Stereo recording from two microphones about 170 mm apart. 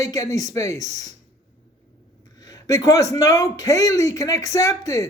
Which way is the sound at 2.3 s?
20° left (ahead or behind).